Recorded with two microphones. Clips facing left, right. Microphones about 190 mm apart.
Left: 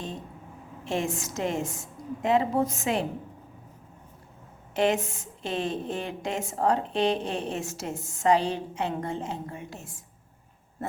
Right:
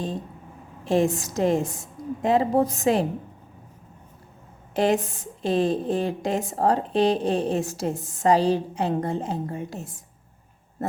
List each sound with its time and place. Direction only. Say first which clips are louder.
0.9 s a woman's voice: right 8 dB; 35° right (ahead or behind)
4.7 s a woman's voice: right 3 dB; 35° right (ahead or behind)